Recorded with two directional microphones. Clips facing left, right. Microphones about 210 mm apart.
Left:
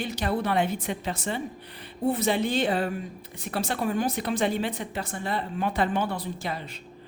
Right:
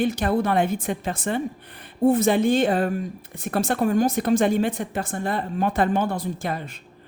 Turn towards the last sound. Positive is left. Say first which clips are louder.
# right 5 dB
turn(degrees=-50)  # may be behind; listen again after turning